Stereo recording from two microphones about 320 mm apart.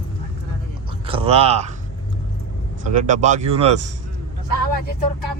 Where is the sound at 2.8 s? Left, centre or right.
Right.